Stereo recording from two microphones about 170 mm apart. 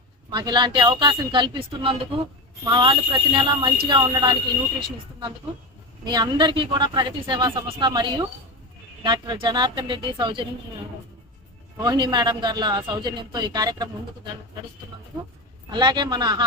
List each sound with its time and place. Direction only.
0.3 s speech: 25° right (ahead or behind)
6.1 s speech: 25° right (ahead or behind)
11.8 s speech: 25° right (ahead or behind)
15.7 s speech: 25° right (ahead or behind)